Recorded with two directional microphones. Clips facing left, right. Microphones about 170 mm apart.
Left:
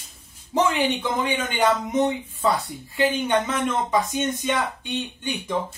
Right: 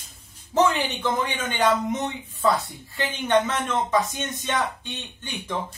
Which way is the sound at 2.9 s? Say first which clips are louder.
Left 4 dB; 15° left (ahead or behind).